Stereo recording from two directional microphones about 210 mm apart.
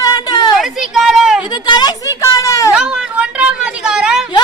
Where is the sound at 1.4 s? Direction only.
20° left (ahead or behind).